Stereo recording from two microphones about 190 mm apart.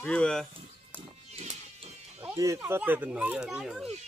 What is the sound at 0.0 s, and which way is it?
Speech, 5° left (ahead or behind).